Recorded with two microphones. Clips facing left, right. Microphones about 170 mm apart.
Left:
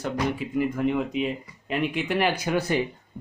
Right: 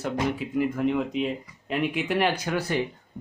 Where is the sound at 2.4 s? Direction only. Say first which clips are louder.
Left 2 dB; 20° left (ahead or behind).